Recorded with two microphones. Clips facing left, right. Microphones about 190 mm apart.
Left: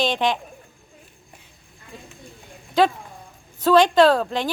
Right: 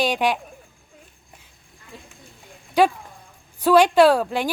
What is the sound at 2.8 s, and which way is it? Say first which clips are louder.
Speech: right 1 dB; 10° right (ahead or behind).